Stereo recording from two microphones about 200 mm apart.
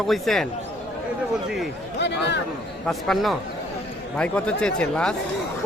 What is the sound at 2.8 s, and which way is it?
Speech, centre (ahead or behind).